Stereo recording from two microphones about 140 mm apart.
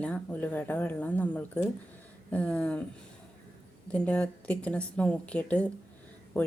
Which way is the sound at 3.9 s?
10° left (ahead or behind).